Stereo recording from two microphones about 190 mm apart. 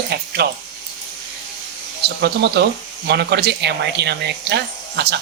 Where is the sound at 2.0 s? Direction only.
60° right (ahead or behind).